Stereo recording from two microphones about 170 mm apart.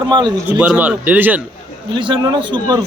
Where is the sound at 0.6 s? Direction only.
10° right (ahead or behind).